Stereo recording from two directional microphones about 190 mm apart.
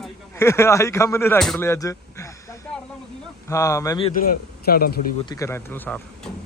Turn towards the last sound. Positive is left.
turn(degrees=10)  # may be behind; listen again after turning